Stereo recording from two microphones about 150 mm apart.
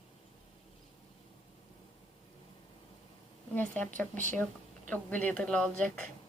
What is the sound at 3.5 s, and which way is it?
Speech, 10° left (ahead or behind).